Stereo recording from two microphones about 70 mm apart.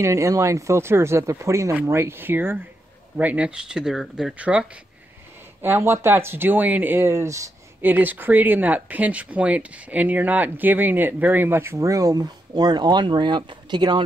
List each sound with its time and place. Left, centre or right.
0.0 s speech: right
1.9 s speech: right; by 4.3 s centre
4.4 s speech: centre
5.6 s speech: right
7.8 s speech: right